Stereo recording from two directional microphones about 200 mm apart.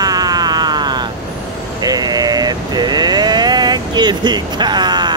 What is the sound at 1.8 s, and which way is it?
Vehicle, 20° right (ahead or behind).